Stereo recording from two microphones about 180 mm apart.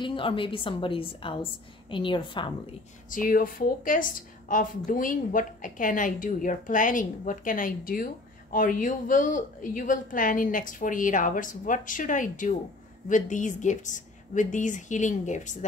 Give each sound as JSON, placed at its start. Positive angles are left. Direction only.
{"t": 0.0, "sound": "a woman's voice", "side_deg": 30}
{"t": 3.1, "sound": "a woman's voice", "side_deg": 50}